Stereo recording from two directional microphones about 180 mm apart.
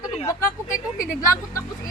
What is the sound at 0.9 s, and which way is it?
Speech, 50° left (ahead or behind).